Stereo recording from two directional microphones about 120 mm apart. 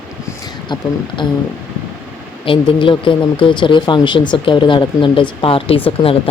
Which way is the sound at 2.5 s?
45° left (ahead or behind).